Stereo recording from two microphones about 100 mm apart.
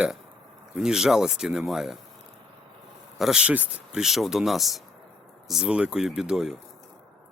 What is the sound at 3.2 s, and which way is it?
Speech, 5° right (ahead or behind).